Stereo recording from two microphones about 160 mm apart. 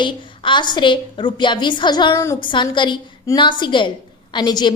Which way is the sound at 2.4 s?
30° left (ahead or behind).